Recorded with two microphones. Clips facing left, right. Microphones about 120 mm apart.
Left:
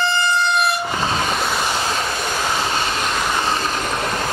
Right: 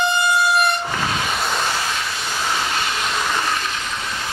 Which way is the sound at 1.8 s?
35° left (ahead or behind).